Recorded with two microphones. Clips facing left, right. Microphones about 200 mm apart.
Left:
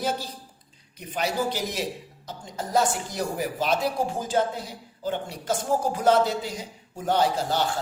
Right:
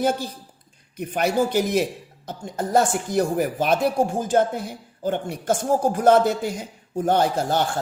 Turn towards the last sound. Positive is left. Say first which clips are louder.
# right 3 dB
turn(degrees=-50)  # may be behind; listen again after turning